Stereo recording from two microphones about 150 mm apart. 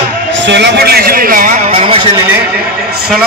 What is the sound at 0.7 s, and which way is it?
A man's voice, 90° right.